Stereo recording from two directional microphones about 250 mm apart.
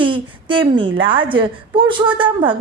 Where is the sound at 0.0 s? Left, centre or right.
Centre.